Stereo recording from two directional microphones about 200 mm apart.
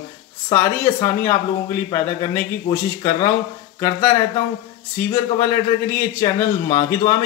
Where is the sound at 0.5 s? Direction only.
10° left (ahead or behind).